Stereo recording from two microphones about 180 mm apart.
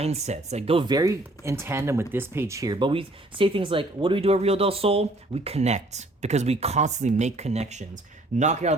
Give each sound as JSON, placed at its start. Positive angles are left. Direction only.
{"t": 0.0, "sound": "speech", "side_deg": -35}